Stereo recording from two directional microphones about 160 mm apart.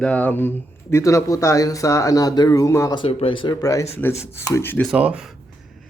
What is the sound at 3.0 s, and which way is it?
Speech, 35° left (ahead or behind).